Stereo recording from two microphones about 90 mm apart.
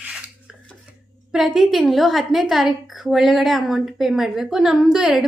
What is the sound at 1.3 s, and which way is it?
A woman's voice, 5° right (ahead or behind).